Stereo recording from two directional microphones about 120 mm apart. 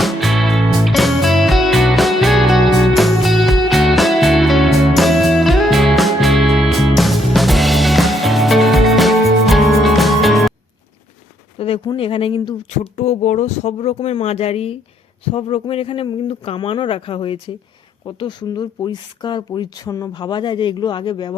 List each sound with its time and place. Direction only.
0.0 s music: centre (ahead or behind)
11.5 s a sound: 55° left (ahead or behind)
11.9 s speech: 50° left (ahead or behind)
13.0 s speech: 80° left; by 21.3 s 40° left (ahead or behind)